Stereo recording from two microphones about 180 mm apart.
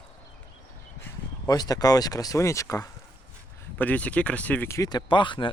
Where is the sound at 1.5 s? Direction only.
20° left (ahead or behind).